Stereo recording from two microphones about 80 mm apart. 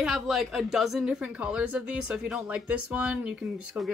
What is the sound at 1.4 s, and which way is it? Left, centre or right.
Speech, centre.